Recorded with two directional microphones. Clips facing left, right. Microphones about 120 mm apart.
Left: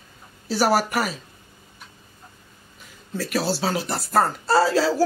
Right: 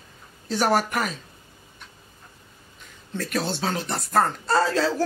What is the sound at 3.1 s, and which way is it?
Speech, 5° left (ahead or behind).